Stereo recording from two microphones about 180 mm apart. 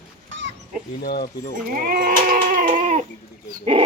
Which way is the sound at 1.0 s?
55° left (ahead or behind).